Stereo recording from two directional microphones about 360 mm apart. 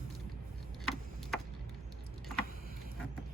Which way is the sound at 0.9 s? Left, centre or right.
Centre.